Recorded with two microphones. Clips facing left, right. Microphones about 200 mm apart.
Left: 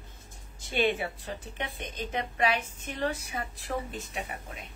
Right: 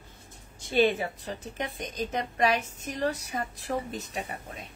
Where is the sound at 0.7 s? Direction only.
35° right (ahead or behind).